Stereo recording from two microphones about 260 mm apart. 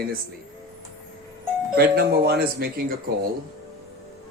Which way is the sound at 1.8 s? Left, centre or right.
Right.